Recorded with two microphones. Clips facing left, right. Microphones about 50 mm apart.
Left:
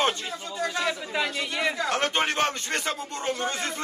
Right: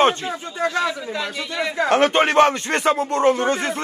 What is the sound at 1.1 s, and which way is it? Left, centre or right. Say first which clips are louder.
Speech: right 2 dB; centre.